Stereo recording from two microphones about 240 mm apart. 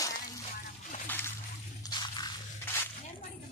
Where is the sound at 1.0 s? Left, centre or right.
Centre.